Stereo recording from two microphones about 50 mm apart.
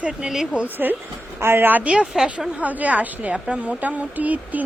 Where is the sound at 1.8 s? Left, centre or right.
Right.